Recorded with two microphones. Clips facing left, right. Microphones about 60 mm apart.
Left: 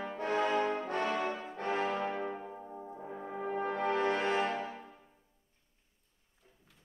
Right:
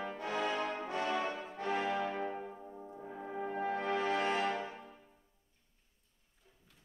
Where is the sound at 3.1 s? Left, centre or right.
Centre.